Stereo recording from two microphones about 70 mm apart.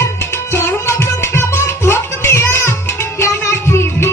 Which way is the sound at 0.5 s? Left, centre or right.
Left.